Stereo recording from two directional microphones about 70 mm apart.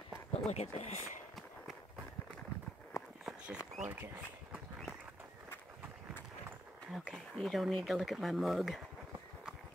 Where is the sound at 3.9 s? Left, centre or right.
Right.